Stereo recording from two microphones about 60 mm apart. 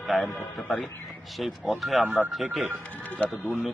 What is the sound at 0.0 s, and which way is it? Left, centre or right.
Speech, centre.